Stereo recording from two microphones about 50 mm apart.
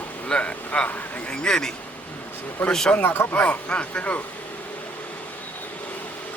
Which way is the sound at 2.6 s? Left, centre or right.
Left.